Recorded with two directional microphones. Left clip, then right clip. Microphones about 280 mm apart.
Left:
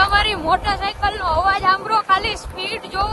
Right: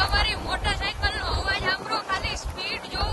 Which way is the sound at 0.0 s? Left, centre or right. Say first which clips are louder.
Left 8 dB; centre.